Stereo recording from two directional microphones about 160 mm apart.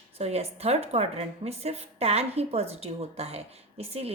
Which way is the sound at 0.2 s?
40° right (ahead or behind).